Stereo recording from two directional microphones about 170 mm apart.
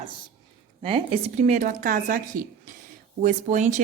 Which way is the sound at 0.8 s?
30° right (ahead or behind).